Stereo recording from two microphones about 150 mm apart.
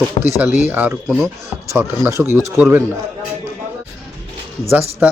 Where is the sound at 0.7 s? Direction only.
10° right (ahead or behind).